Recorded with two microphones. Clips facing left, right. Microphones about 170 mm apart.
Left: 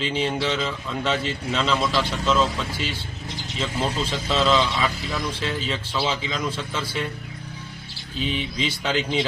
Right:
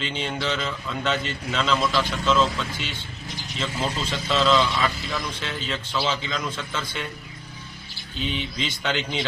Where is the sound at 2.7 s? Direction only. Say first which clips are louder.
Left 4 dB; 35° left (ahead or behind).